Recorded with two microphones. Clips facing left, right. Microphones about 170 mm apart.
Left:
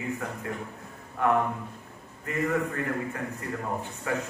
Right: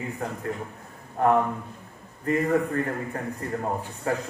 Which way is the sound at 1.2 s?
40° right (ahead or behind).